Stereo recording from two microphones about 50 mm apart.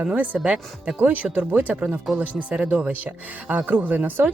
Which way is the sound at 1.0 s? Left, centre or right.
Right.